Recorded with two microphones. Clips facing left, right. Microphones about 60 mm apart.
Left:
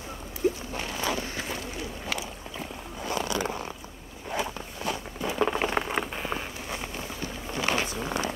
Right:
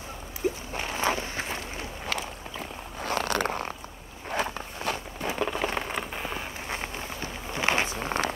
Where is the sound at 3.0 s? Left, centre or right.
Right.